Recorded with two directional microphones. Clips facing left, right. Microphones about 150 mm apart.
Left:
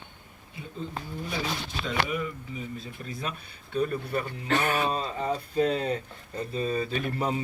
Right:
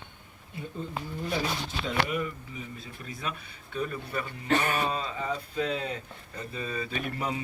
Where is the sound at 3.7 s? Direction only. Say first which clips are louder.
Left 5 dB; 35° left (ahead or behind).